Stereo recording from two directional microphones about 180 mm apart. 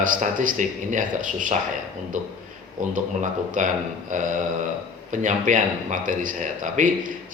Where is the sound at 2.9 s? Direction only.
45° right (ahead or behind).